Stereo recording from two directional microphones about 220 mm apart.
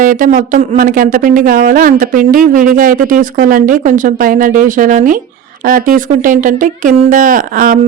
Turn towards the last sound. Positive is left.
turn(degrees=-40)  # may be behind; listen again after turning